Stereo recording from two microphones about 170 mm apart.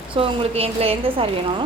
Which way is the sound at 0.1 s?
35° right (ahead or behind).